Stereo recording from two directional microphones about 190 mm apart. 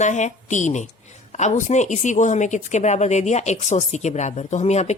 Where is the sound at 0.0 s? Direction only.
40° left (ahead or behind).